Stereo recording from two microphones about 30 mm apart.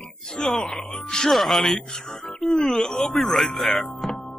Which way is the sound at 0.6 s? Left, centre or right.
Centre.